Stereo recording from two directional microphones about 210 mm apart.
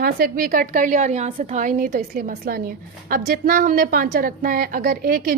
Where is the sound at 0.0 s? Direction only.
45° right (ahead or behind).